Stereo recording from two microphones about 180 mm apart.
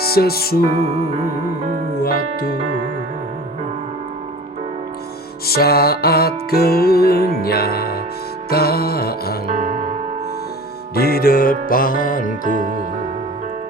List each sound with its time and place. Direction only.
0.0 s music: 60° left (ahead or behind)
0.8 s music: 35° right (ahead or behind)
2.0 s music: 55° left (ahead or behind)
5.5 s music: 60° left (ahead or behind)
9.5 s music: 35° right (ahead or behind)
10.9 s music: 55° left (ahead or behind)